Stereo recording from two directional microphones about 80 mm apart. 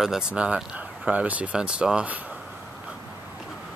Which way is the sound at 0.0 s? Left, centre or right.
Centre.